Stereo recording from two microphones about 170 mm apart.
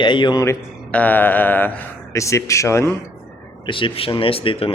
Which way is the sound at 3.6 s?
30° left (ahead or behind).